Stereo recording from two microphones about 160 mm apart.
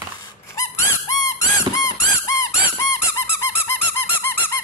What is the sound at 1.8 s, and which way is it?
Squeak, 20° left (ahead or behind).